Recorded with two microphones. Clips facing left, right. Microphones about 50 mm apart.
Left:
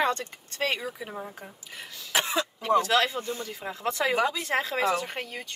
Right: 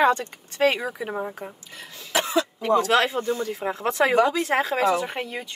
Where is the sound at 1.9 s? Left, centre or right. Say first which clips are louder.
Right 1 dB; right.